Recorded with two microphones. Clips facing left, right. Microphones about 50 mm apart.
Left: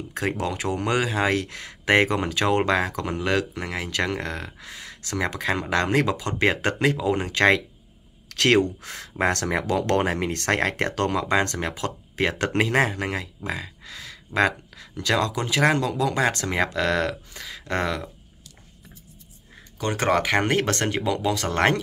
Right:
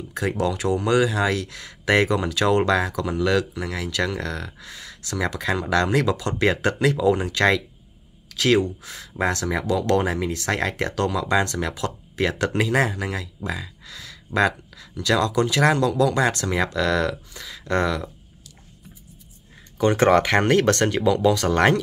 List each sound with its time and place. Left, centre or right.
0.1 s speech: left
8.3 s speech: left
19.8 s speech: centre
20.4 s speech: centre